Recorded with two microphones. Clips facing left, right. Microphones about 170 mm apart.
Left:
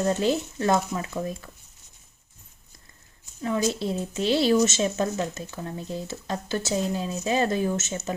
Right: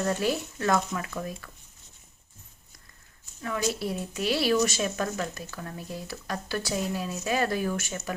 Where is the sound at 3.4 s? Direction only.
25° left (ahead or behind).